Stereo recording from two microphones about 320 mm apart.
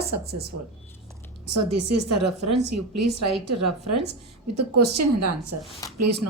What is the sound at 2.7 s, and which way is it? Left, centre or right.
A woman's voice, right.